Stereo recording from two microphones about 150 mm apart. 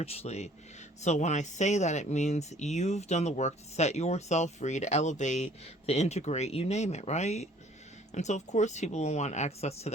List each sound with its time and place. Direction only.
0.0 s speech: 40° left (ahead or behind)